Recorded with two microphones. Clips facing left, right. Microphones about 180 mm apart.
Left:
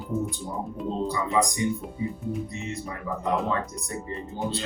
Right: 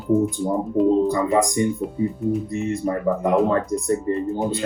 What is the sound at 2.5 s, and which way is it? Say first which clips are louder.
Speech: right 11 dB; 50° right (ahead or behind).